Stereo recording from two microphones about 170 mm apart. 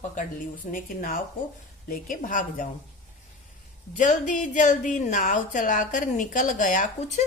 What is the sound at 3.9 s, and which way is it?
A woman's voice, 45° left (ahead or behind).